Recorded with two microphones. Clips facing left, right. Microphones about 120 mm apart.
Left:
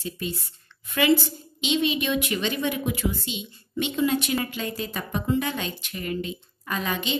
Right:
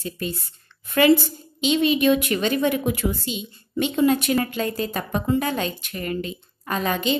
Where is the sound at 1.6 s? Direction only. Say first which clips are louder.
Right 5 dB; 45° right (ahead or behind).